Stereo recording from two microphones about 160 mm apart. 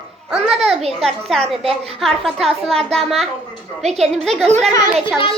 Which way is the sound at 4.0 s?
Centre (ahead or behind).